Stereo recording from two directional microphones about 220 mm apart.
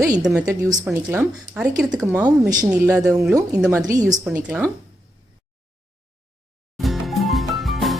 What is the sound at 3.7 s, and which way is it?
Speech, 15° right (ahead or behind).